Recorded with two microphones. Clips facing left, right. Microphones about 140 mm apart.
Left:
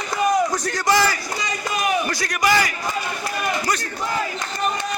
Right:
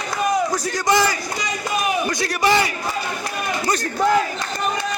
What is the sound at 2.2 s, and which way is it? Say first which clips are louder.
Battle cry: right 4 dB; 25° right (ahead or behind).